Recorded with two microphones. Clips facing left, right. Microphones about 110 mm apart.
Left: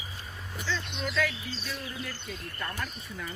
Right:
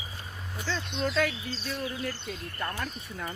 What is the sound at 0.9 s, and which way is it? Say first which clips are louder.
Speech: right 5 dB; 35° right (ahead or behind).